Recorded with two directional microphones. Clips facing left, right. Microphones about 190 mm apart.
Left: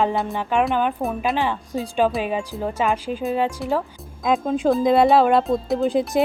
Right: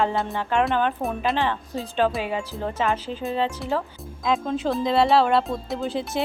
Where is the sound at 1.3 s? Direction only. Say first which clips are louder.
Left 2 dB; 15° left (ahead or behind).